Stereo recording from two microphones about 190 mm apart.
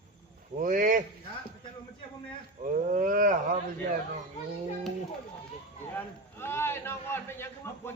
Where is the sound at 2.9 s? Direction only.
45° right (ahead or behind).